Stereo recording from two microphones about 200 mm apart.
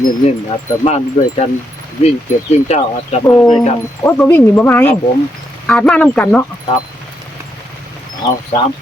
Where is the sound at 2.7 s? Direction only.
35° left (ahead or behind).